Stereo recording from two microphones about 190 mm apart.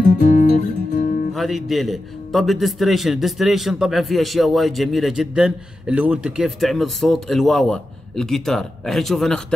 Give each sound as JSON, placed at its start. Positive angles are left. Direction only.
{"t": 0.0, "sound": "music", "side_deg": 40}
{"t": 1.3, "sound": "a man's voice", "side_deg": 0}